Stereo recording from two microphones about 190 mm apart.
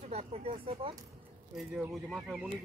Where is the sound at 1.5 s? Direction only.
5° right (ahead or behind).